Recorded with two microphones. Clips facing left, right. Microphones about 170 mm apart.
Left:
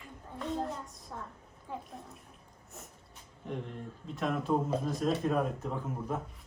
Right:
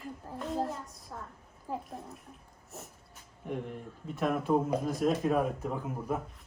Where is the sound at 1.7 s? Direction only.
40° right (ahead or behind).